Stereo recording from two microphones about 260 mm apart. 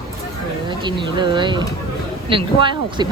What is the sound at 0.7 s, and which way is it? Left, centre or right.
Speech, centre.